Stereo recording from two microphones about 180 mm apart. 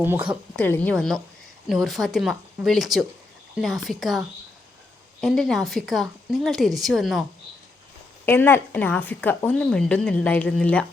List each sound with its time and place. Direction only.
0.0 s a woman's voice: 10° right (ahead or behind)
0.5 s a woman's voice: 10° left (ahead or behind)
5.2 s a woman's voice: centre (ahead or behind)
8.2 s a woman's voice: 10° left (ahead or behind)